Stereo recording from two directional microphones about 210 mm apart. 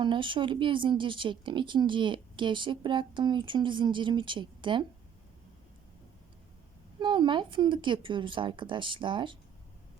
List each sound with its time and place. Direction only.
0.0 s speech: 25° right (ahead or behind)
7.0 s speech: 20° right (ahead or behind)